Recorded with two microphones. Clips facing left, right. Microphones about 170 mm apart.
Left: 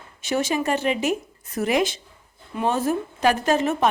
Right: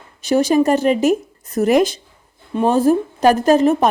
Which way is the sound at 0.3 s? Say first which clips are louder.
Right 9 dB; 35° right (ahead or behind).